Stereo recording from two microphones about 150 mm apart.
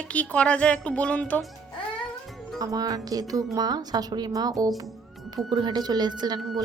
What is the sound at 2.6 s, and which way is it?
A woman's voice, 25° right (ahead or behind).